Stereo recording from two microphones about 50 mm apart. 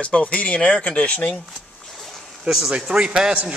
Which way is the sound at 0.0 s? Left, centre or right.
Left.